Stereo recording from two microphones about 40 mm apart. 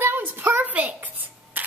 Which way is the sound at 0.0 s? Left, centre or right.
Right.